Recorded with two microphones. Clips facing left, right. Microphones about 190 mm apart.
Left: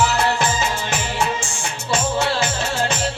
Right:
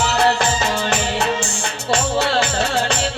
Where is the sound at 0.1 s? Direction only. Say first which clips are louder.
Right 3 dB; 65° right (ahead or behind).